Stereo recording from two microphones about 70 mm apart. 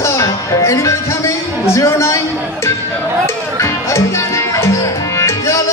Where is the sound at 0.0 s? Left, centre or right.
Left.